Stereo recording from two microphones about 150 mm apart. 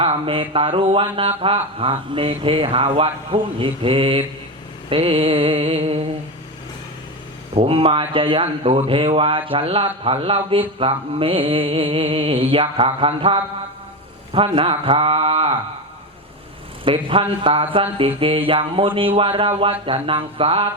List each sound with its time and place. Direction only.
0.0 s speech: 40° right (ahead or behind)
7.5 s speech: 40° right (ahead or behind)
16.8 s speech: 35° right (ahead or behind)